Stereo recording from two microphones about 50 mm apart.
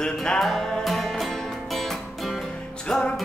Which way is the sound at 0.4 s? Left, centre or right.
Centre.